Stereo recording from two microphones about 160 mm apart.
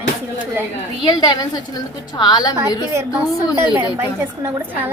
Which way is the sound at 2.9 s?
15° right (ahead or behind).